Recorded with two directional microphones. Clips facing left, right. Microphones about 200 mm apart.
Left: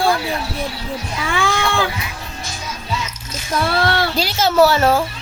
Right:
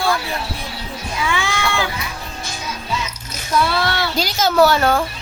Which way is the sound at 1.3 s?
50° left (ahead or behind).